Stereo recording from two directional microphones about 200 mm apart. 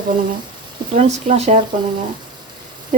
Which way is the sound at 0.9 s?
35° right (ahead or behind).